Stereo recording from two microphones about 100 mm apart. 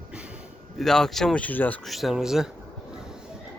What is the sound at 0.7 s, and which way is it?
Speech, 5° left (ahead or behind).